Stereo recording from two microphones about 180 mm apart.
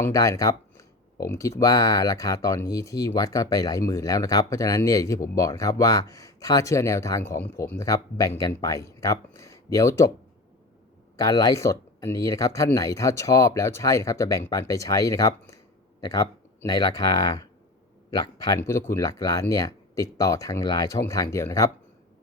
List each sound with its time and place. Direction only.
0.0 s speech: 20° left (ahead or behind)
11.2 s speech: 20° left (ahead or behind)